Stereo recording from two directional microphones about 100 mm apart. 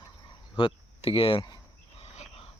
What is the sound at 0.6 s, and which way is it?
Speech, 65° left (ahead or behind).